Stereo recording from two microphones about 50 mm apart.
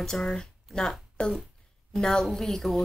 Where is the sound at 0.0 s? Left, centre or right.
Centre.